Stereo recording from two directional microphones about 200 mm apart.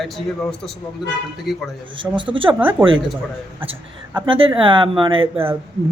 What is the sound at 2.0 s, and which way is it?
Speech, 25° right (ahead or behind).